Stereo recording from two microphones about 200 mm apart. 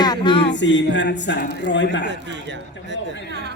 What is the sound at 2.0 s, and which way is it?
Speech, 60° right (ahead or behind).